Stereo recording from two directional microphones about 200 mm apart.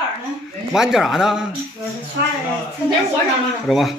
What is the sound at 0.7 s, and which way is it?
Speech, centre (ahead or behind).